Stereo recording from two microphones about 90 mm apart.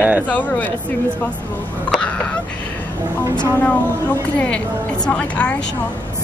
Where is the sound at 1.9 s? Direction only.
10° left (ahead or behind).